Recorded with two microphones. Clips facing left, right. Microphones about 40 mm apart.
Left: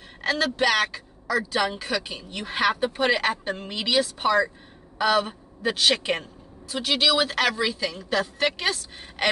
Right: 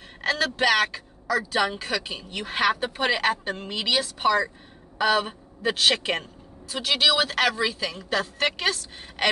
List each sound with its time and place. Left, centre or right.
0.2 s a woman's voice: centre
5.9 s a woman's voice: centre
7.5 s a woman's voice: right